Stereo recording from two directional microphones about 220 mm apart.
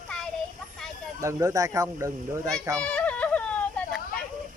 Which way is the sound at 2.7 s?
5° left (ahead or behind).